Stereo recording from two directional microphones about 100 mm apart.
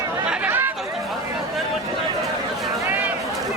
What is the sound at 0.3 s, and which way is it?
Chatter, 20° right (ahead or behind).